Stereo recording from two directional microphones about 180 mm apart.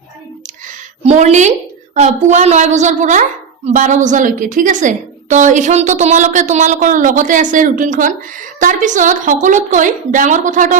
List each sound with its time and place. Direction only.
1.0 s a woman's voice: 40° right (ahead or behind)